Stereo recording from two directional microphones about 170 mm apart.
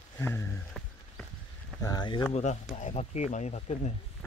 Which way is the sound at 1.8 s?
25° left (ahead or behind).